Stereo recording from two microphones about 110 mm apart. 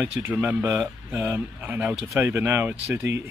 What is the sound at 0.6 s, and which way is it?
Speech, 30° right (ahead or behind).